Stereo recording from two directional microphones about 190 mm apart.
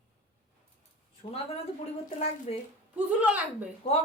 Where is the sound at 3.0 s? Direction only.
10° right (ahead or behind).